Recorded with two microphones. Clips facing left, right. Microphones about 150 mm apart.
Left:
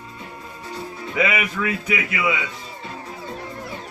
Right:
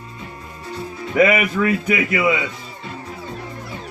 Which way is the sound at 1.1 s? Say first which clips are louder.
Right 7 dB; 50° right (ahead or behind).